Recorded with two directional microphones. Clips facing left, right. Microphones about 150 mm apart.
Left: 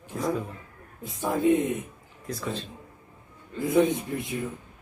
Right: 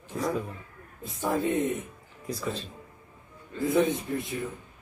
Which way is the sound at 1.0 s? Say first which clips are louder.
Left 4 dB; 20° left (ahead or behind).